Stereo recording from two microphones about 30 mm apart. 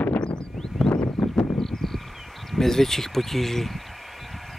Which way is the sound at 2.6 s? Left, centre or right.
Centre.